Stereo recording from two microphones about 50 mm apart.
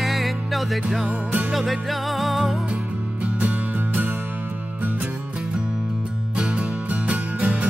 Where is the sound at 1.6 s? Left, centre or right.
Centre.